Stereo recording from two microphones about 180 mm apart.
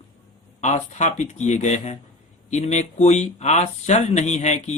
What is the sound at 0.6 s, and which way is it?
A man's voice, 40° left (ahead or behind).